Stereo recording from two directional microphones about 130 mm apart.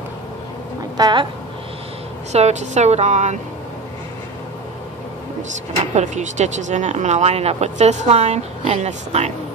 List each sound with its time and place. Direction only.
0.9 s a woman's voice: 30° right (ahead or behind)
2.3 s speech: 60° right (ahead or behind)
5.9 s speech: 60° right (ahead or behind)